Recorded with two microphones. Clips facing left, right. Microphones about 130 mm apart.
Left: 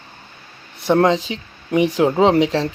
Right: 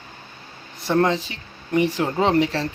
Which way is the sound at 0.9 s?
90° left.